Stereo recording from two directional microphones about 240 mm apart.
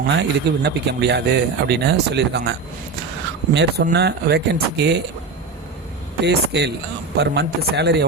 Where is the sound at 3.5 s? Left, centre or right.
Right.